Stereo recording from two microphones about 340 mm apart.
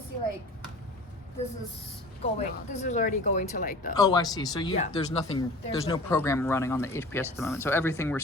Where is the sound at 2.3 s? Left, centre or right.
Left.